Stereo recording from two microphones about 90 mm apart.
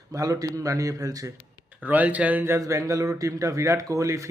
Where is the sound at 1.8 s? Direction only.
15° right (ahead or behind).